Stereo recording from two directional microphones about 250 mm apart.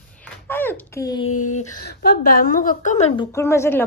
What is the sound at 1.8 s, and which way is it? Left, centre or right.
A woman's voice, left.